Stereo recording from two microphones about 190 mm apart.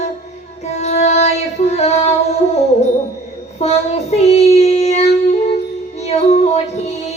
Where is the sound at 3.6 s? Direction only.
35° left (ahead or behind).